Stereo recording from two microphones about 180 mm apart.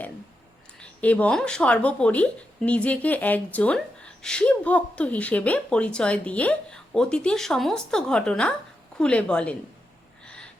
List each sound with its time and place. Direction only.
0.8 s speech: 10° left (ahead or behind)